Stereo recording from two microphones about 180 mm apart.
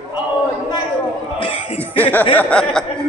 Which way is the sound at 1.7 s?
10° left (ahead or behind).